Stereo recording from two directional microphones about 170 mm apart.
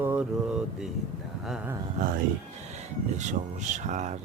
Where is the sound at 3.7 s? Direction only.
45° right (ahead or behind).